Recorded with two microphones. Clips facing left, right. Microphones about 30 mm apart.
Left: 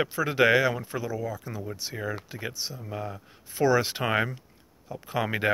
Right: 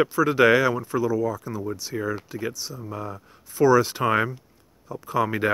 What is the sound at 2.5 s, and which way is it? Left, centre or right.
Speech, left.